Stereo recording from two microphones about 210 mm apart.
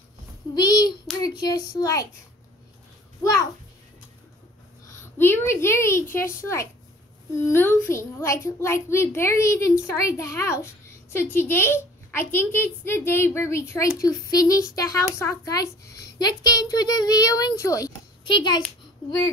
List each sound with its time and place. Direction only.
0.6 s a child's voice: 20° left (ahead or behind)
5.1 s a child's voice: 10° left (ahead or behind)